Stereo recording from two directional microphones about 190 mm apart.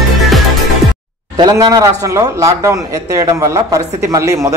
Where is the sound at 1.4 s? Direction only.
20° right (ahead or behind).